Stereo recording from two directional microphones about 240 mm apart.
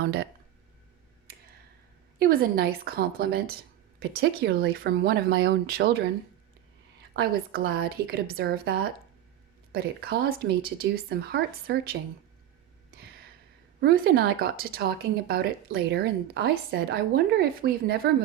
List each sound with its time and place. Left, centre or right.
0.0 s speech: right
2.1 s speech: right
7.2 s speech: right
13.8 s speech: right